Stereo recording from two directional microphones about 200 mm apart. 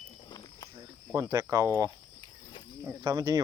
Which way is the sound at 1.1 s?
20° right (ahead or behind).